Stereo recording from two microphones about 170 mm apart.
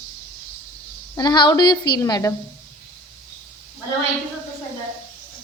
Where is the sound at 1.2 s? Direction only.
25° left (ahead or behind).